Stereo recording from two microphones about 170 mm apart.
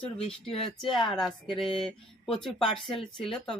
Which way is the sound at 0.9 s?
Centre (ahead or behind).